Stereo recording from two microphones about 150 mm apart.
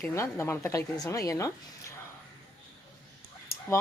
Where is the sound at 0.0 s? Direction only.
20° left (ahead or behind).